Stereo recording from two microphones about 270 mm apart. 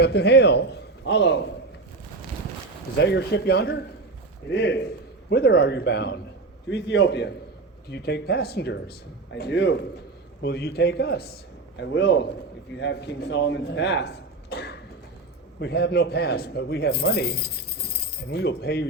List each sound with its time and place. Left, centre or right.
0.0 s a man's voice: left
3.0 s a man's voice: left